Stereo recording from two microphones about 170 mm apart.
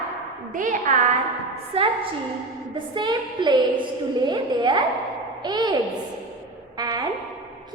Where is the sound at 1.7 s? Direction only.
35° right (ahead or behind).